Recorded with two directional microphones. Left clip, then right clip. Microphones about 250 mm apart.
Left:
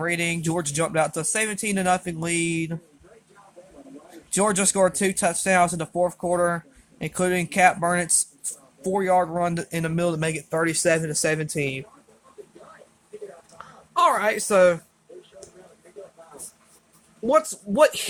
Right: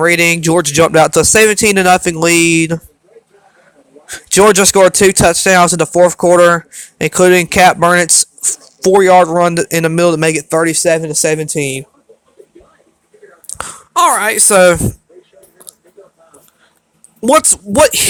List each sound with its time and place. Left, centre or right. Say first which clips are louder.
0.0 s speech: right 15 dB; right
4.3 s speech: right 15 dB; right
13.6 s speech: right 9 dB; right
17.2 s speech: right 11 dB; right